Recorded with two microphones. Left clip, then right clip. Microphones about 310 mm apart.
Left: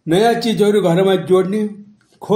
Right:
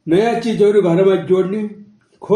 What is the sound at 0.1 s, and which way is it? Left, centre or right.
Speech, left.